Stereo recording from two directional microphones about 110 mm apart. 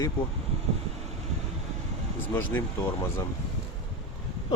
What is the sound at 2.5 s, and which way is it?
Speech, 25° left (ahead or behind).